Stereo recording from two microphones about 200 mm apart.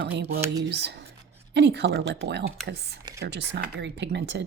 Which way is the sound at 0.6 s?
60° right (ahead or behind).